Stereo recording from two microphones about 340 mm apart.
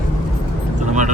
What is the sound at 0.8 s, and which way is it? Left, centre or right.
Speech, right.